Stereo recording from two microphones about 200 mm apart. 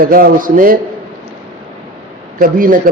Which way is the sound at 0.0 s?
45° right (ahead or behind).